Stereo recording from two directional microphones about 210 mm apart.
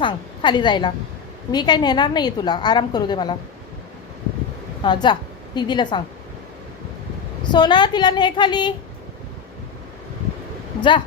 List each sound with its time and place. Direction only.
0.0 s a woman's voice: 20° left (ahead or behind)
4.8 s a woman's voice: 20° left (ahead or behind)
7.4 s a woman's voice: 20° left (ahead or behind)
10.8 s speech: 20° left (ahead or behind)